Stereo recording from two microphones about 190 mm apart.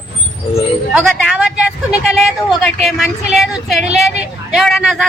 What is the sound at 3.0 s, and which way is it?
A woman's voice, centre (ahead or behind).